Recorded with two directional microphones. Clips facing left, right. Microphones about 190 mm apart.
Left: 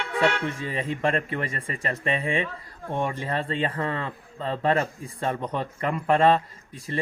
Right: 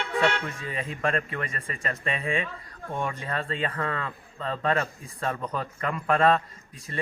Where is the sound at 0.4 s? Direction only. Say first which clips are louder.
Left 5 dB; 30° left (ahead or behind).